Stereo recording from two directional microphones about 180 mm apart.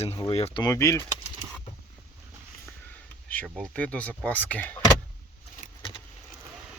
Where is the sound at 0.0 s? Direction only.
30° left (ahead or behind).